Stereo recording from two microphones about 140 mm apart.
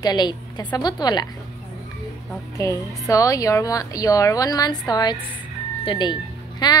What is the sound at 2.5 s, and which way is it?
A woman's voice, 25° left (ahead or behind).